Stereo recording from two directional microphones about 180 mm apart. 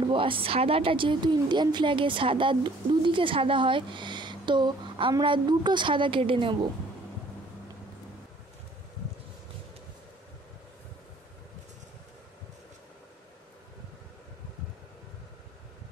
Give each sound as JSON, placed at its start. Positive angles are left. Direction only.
{"t": 0.1, "sound": "a woman's voice", "side_deg": -30}